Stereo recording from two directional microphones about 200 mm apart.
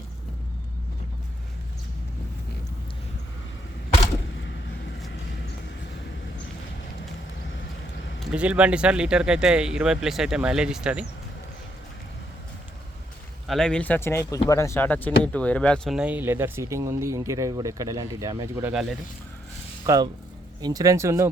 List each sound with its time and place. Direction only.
8.2 s speech: 5° right (ahead or behind)
13.5 s speech: 5° left (ahead or behind); by 18.7 s 15° right (ahead or behind)
18.7 s speech: 5° right (ahead or behind)
19.8 s speech: 20° right (ahead or behind)